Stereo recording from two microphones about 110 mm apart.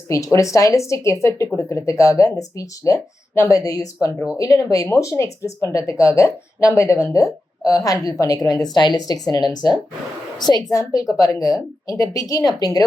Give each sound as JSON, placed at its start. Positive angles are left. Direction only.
{"t": 0.1, "sound": "a woman's voice", "side_deg": 30}